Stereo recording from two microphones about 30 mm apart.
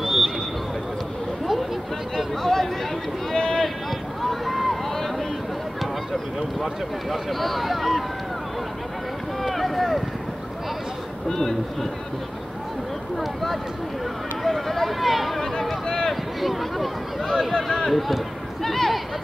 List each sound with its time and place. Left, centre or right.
0.0 s a sound: centre
2.4 s speech: centre
3.3 s a sound: left
4.2 s run: centre
6.6 s speech: centre
9.4 s boat: centre
11.2 s speech: centre
13.2 s speech: centre
17.3 s speech: centre
17.9 s speech: centre